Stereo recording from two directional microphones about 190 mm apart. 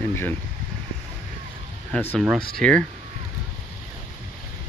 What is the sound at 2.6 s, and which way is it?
Speech, 5° left (ahead or behind).